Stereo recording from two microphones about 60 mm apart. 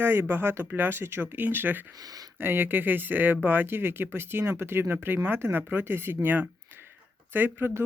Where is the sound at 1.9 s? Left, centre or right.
Right.